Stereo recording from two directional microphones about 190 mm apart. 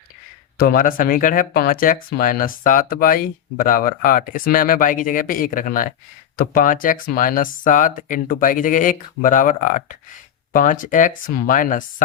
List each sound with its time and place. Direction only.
0.6 s speech: 50° left (ahead or behind)